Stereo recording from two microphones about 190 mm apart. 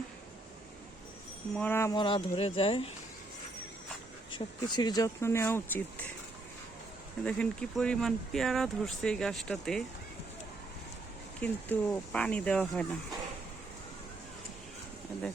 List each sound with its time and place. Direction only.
1.5 s speech: 10° left (ahead or behind)
2.0 s speech: 25° left (ahead or behind)
4.3 s speech: 25° left (ahead or behind)
7.3 s speech: 5° left (ahead or behind)
11.3 s speech: 10° left (ahead or behind)